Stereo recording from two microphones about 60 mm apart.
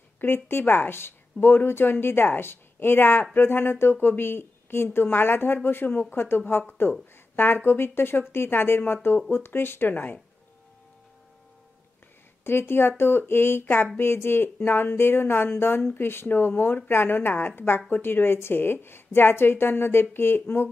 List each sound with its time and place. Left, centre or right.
0.2 s speech: left
12.4 s speech: left